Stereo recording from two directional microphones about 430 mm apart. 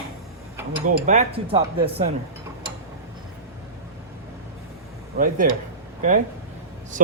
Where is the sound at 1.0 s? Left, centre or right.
Centre.